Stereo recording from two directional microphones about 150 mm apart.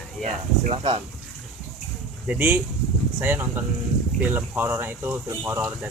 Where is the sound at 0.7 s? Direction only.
40° right (ahead or behind).